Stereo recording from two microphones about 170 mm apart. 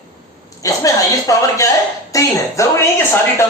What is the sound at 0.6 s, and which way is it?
A man's voice, 20° left (ahead or behind).